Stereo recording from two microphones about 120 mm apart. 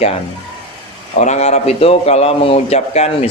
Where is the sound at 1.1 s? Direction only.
75° left (ahead or behind).